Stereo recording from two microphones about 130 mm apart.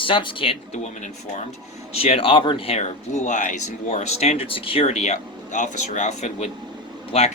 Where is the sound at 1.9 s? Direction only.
50° left (ahead or behind).